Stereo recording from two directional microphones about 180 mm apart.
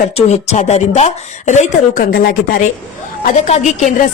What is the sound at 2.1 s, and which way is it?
Speech, 55° left (ahead or behind).